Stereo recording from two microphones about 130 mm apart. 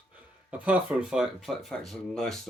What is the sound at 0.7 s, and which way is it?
Speech, 5° right (ahead or behind).